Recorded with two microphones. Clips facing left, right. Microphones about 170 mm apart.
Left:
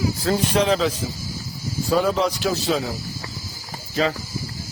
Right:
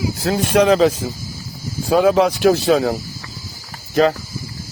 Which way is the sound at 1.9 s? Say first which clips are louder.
Right 6 dB; 70° right (ahead or behind).